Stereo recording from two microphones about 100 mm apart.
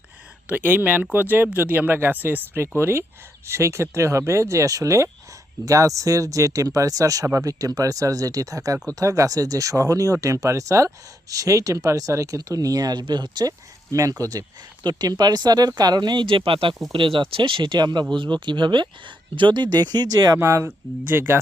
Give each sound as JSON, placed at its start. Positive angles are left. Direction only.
{"t": 0.4, "sound": "speech", "side_deg": -15}
{"t": 13.9, "sound": "speech", "side_deg": -35}